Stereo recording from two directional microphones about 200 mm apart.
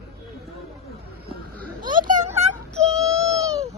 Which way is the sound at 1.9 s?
40° right (ahead or behind).